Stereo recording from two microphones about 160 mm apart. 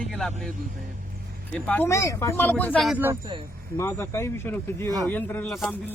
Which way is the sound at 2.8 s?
10° right (ahead or behind).